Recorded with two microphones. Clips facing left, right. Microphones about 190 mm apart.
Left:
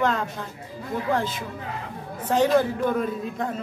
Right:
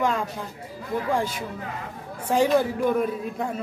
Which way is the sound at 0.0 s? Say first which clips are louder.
Left 1 dB; 10° right (ahead or behind).